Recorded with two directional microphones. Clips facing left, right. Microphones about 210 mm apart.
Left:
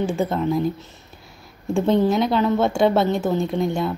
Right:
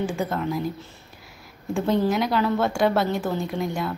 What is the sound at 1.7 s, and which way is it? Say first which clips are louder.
A woman's voice: left 4 dB; 25° left (ahead or behind).